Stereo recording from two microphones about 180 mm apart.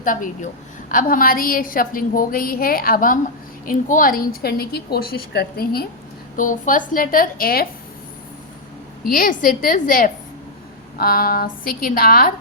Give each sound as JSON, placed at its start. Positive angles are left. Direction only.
{"t": 0.0, "sound": "a woman's voice", "side_deg": 50}
{"t": 4.4, "sound": "a woman's voice", "side_deg": 60}
{"t": 6.3, "sound": "a woman's voice", "side_deg": 50}
{"t": 9.0, "sound": "a woman's voice", "side_deg": 50}